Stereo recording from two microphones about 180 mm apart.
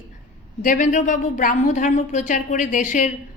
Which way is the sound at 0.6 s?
45° left (ahead or behind).